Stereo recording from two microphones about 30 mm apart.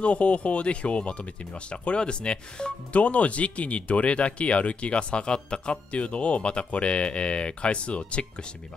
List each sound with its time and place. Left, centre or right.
0.0 s speech: left
2.9 s speech: left
5.9 s speech: left